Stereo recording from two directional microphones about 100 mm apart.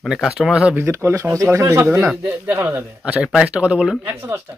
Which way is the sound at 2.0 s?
15° right (ahead or behind).